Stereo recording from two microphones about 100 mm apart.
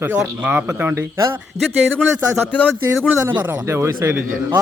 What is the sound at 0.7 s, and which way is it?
Speech, 25° right (ahead or behind).